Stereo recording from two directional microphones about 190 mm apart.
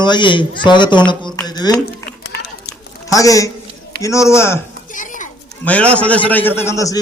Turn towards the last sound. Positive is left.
turn(degrees=15)  # may be behind; listen again after turning